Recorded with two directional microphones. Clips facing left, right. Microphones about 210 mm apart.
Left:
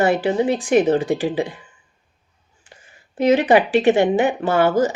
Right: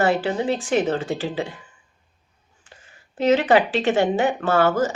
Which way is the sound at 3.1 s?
15° left (ahead or behind).